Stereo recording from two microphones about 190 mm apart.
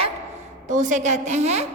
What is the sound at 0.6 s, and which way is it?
A woman's voice, 40° right (ahead or behind).